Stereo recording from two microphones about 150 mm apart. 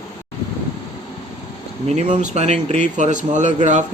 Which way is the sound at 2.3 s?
50° right (ahead or behind).